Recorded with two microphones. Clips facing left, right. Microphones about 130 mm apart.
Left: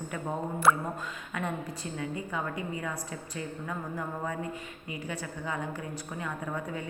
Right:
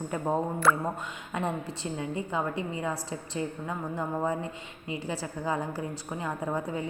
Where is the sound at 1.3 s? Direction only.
30° right (ahead or behind).